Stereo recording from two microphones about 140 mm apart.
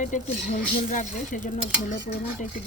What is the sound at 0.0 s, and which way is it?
Speech, 65° left (ahead or behind).